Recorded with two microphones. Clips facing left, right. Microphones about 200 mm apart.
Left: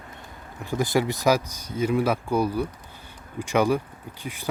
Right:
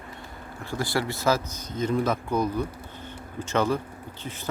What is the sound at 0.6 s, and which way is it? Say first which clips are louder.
Speech: left 5 dB; 20° left (ahead or behind).